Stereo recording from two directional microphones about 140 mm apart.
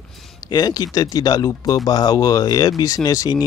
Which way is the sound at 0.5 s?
30° left (ahead or behind).